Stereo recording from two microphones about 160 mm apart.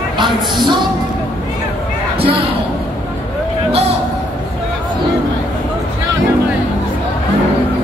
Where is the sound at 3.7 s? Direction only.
40° right (ahead or behind).